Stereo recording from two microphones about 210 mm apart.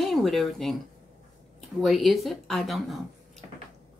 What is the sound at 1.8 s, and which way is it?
A woman's voice, centre (ahead or behind).